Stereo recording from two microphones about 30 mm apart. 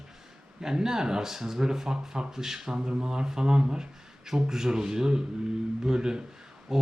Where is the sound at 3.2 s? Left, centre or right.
Right.